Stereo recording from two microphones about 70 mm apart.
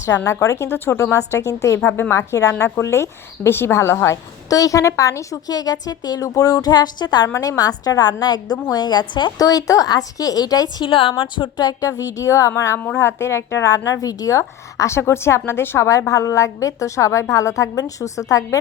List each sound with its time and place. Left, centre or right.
0.3 s a woman's voice: left
1.8 s a woman's voice: left
4.4 s a woman's voice: left
7.3 s a woman's voice: left
11.9 s a woman's voice: left
13.7 s speech: left
15.9 s a woman's voice: left